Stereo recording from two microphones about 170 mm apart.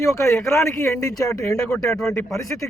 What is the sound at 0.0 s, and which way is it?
Speech, 15° left (ahead or behind).